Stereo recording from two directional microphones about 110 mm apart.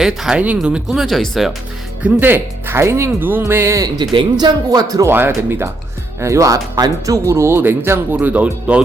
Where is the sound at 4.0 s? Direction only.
40° right (ahead or behind).